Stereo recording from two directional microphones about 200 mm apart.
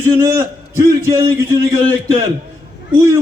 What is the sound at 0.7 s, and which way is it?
Speech, 15° right (ahead or behind).